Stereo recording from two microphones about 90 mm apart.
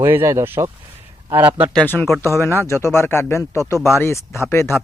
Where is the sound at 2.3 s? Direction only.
25° left (ahead or behind).